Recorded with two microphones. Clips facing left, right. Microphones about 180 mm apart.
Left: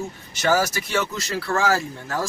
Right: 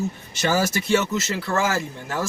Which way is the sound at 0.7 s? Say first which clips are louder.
Right 4 dB; 20° right (ahead or behind).